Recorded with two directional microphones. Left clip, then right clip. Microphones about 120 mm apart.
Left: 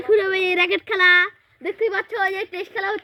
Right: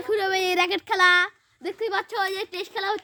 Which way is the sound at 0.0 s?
45° right (ahead or behind).